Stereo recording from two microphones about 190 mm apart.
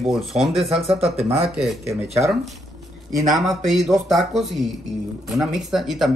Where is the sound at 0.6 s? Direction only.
30° right (ahead or behind).